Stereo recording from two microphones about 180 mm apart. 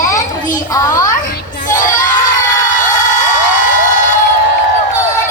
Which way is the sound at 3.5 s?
45° left (ahead or behind).